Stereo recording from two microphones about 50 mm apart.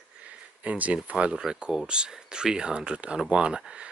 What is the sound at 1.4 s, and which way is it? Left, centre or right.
Speech, centre.